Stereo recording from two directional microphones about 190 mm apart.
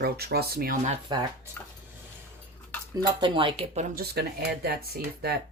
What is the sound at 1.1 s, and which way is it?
Speech, 25° right (ahead or behind).